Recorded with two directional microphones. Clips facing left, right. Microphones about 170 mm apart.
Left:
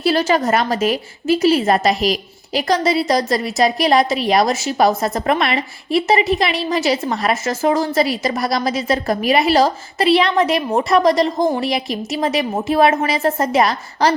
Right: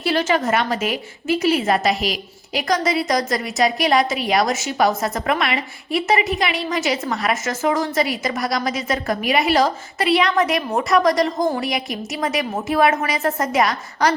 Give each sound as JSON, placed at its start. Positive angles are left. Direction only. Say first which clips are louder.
{"t": 0.0, "sound": "a woman's voice", "louder": "left 3 dB", "side_deg": 35}